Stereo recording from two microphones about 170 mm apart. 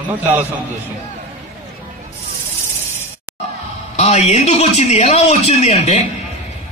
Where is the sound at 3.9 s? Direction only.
40° left (ahead or behind).